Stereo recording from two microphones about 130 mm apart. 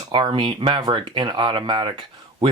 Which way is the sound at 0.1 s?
35° right (ahead or behind).